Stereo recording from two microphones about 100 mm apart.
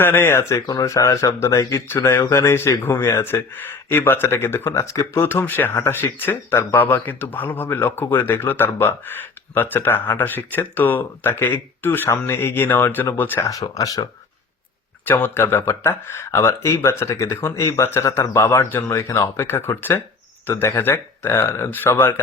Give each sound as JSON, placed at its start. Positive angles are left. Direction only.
{"t": 0.0, "sound": "speech", "side_deg": 20}
{"t": 13.5, "sound": "speech", "side_deg": 35}
{"t": 15.0, "sound": "speech", "side_deg": 20}